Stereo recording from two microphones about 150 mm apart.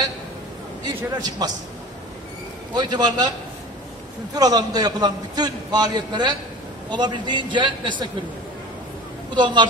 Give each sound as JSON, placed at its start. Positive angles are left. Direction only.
{"t": 0.8, "sound": "a man's voice", "side_deg": -25}
{"t": 2.7, "sound": "a man's voice", "side_deg": -30}
{"t": 4.4, "sound": "a man's voice", "side_deg": -25}
{"t": 9.3, "sound": "a man's voice", "side_deg": -30}